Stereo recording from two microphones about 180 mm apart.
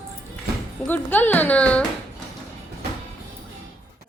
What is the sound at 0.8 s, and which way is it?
A woman's voice, 10° left (ahead or behind).